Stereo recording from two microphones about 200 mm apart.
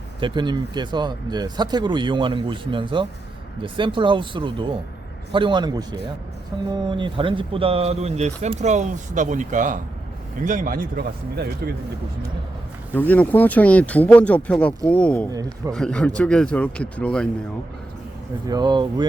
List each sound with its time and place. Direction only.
0.2 s speech: 25° right (ahead or behind); by 11.7 s 50° right (ahead or behind)
12.9 s speech: 10° left (ahead or behind)
15.3 s a man's voice: 20° right (ahead or behind)
15.7 s speech: 5° left (ahead or behind)
18.4 s speech: 20° right (ahead or behind)